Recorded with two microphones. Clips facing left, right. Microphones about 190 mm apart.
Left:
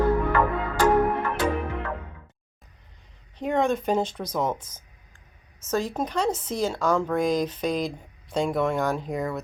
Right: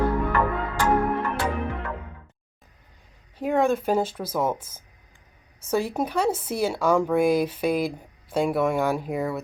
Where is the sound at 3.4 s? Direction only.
5° right (ahead or behind).